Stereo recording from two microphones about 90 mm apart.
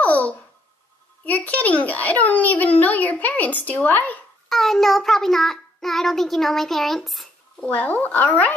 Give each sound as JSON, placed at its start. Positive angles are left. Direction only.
{"t": 0.0, "sound": "a sound", "side_deg": 15}
{"t": 1.2, "sound": "a child's voice", "side_deg": 15}
{"t": 4.5, "sound": "child singing", "side_deg": 0}
{"t": 7.6, "sound": "a child's voice", "side_deg": 15}